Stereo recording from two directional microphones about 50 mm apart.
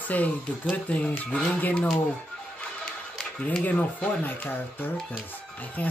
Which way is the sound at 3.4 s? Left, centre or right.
Left.